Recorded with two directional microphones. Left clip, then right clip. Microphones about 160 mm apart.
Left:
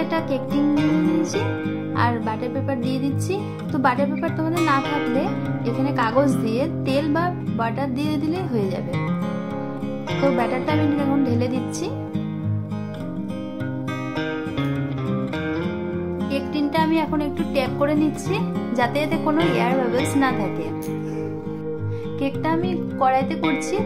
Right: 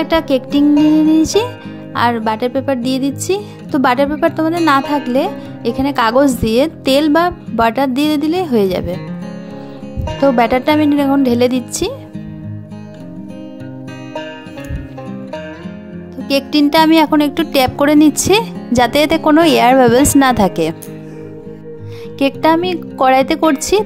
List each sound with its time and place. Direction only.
0.0 s music: 60° right (ahead or behind)
2.0 s music: 60° right (ahead or behind)
10.2 s music: 60° right (ahead or behind)
16.3 s speech: 90° right
22.2 s speech: 75° right (ahead or behind)